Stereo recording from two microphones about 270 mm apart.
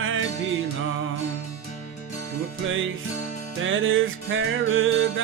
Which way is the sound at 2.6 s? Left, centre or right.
Right.